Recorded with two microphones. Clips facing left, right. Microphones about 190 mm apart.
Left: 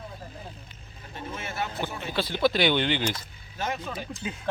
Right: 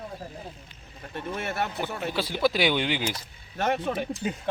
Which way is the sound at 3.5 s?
65° right (ahead or behind).